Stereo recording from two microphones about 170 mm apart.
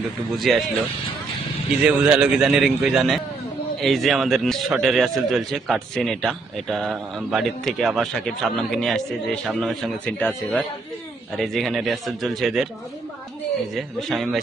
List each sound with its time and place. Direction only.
0.3 s a man's voice: centre (ahead or behind)
1.8 s a man's voice: 5° right (ahead or behind)
13.7 s a man's voice: centre (ahead or behind)